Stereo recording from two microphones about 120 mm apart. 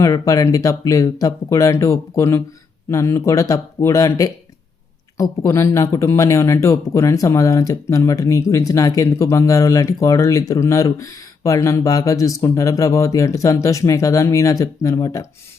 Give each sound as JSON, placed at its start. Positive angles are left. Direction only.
{"t": 0.0, "sound": "speech", "side_deg": 30}